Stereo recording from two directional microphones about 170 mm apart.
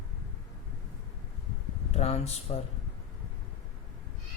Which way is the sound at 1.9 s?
40° left (ahead or behind).